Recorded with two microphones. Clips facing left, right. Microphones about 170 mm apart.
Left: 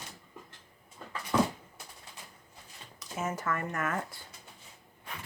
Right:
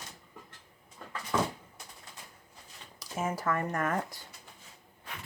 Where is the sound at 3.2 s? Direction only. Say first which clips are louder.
Right 2 dB; 30° right (ahead or behind).